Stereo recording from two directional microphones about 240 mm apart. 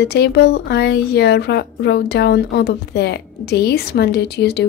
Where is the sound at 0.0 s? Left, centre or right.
Left.